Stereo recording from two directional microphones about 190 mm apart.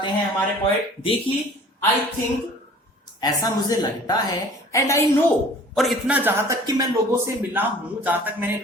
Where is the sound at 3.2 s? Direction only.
20° left (ahead or behind).